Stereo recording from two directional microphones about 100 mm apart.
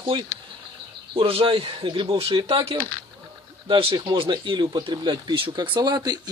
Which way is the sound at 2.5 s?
70° right (ahead or behind).